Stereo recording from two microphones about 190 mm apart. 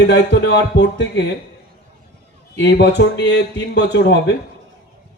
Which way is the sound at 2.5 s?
60° left (ahead or behind).